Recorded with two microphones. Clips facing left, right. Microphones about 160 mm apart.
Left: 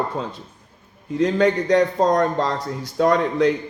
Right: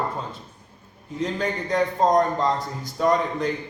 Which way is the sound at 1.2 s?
75° left (ahead or behind).